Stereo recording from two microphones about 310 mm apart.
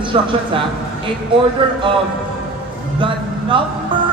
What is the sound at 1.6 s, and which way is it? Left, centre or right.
Speech, centre.